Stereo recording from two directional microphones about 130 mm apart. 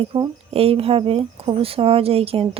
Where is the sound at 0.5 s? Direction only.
50° right (ahead or behind).